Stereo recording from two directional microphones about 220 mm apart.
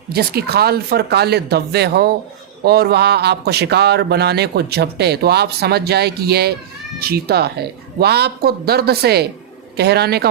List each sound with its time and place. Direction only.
0.1 s speech: 45° right (ahead or behind)